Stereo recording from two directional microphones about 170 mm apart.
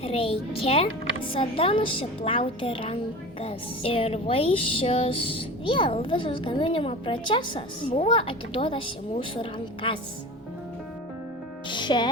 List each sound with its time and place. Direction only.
0.0 s speech: 35° left (ahead or behind)
11.7 s music: 25° left (ahead or behind)